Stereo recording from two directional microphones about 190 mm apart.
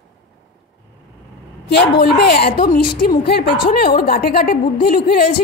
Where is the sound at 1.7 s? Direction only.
60° left (ahead or behind).